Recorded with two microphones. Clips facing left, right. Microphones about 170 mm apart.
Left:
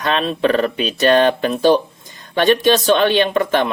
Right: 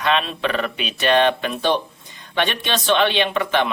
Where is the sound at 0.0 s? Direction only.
40° left (ahead or behind).